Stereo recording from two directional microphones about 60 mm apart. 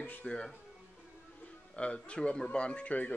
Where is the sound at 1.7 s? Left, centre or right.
Centre.